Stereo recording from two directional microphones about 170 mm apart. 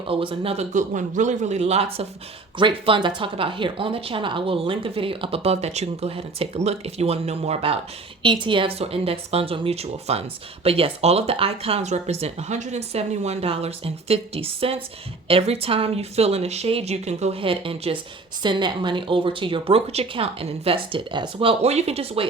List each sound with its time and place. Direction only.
0.1 s speech: 30° right (ahead or behind)